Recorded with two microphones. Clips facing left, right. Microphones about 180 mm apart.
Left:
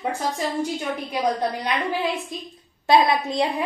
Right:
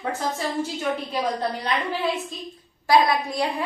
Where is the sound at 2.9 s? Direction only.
20° left (ahead or behind).